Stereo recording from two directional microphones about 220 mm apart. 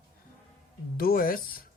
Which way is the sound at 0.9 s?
40° left (ahead or behind).